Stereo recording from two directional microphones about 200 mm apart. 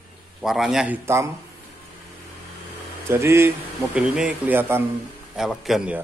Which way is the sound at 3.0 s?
15° right (ahead or behind).